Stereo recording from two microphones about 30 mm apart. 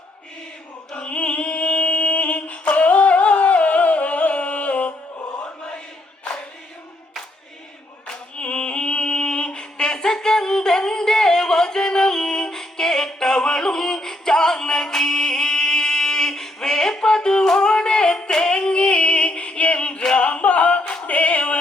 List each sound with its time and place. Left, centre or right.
0.9 s music: left
8.0 s music: left